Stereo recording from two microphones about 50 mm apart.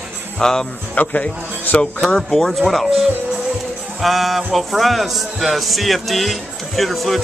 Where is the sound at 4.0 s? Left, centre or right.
Centre.